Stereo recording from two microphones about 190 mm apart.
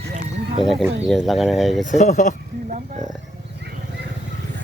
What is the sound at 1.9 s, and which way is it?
Speech, 40° left (ahead or behind).